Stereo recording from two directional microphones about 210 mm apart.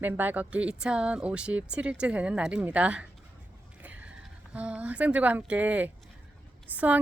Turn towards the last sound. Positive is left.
turn(degrees=-5)  # may be behind; listen again after turning